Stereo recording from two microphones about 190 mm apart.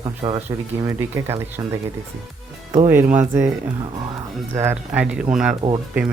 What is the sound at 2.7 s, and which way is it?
Speech, 10° right (ahead or behind).